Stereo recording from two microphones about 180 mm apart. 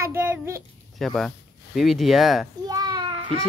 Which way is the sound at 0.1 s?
10° right (ahead or behind).